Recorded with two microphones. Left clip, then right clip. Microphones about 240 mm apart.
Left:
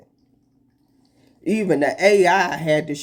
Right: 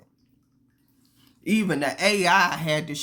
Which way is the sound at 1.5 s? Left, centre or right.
Centre.